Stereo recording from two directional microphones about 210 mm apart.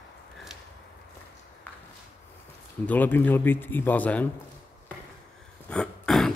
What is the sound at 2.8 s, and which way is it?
Speech, 10° left (ahead or behind).